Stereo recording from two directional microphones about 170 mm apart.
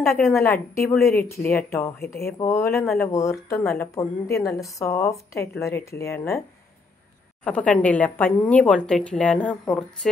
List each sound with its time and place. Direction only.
0.1 s speech: 15° left (ahead or behind)
7.4 s speech: 5° left (ahead or behind)